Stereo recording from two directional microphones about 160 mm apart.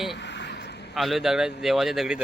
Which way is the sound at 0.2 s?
90° left.